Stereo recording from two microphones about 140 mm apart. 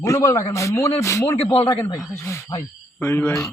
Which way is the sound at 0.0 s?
25° left (ahead or behind).